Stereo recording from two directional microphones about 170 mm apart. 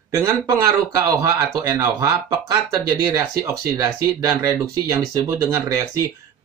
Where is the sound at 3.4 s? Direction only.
15° right (ahead or behind).